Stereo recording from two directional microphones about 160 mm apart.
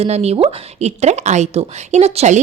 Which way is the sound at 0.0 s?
40° right (ahead or behind).